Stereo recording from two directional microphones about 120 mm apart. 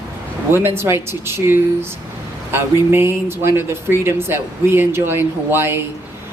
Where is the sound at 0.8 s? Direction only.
20° right (ahead or behind).